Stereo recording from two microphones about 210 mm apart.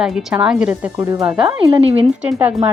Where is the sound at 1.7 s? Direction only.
25° right (ahead or behind).